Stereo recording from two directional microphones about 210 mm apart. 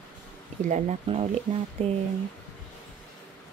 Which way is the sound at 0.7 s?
35° right (ahead or behind).